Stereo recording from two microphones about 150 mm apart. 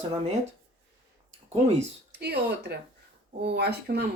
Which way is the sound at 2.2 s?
90° right.